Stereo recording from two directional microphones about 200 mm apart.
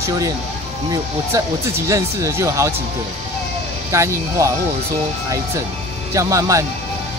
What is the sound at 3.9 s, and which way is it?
Speech, 15° right (ahead or behind).